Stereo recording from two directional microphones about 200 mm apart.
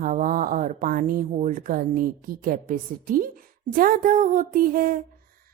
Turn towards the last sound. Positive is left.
turn(degrees=-45)  # may be behind; listen again after turning